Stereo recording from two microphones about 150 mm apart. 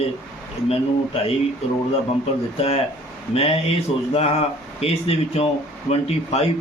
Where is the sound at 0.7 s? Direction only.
40° left (ahead or behind).